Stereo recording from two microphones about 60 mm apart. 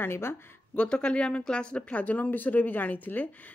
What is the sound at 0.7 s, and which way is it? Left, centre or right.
Speech, centre.